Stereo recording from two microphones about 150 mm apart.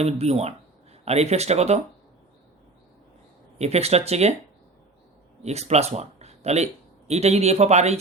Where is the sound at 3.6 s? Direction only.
45° right (ahead or behind).